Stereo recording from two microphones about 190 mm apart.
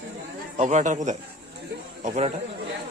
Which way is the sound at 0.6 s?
40° right (ahead or behind).